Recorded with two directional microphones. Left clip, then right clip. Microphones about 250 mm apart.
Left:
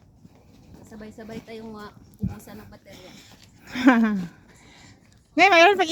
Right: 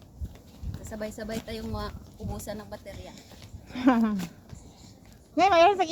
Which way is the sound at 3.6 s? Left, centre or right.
Left.